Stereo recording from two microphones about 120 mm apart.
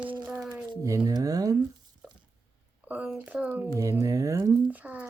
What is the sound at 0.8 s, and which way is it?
Speech, 30° right (ahead or behind).